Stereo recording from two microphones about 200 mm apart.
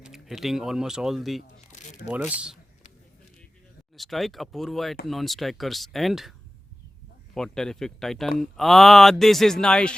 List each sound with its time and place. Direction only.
0.0 s speech: centre (ahead or behind)
1.4 s speech: 35° left (ahead or behind)
2.0 s speech: 5° right (ahead or behind)
3.9 s speech: centre (ahead or behind)
7.3 s speech: 5° left (ahead or behind)